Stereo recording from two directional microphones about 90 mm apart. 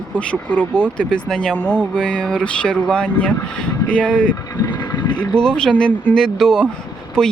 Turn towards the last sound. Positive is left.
turn(degrees=5)  # may be behind; listen again after turning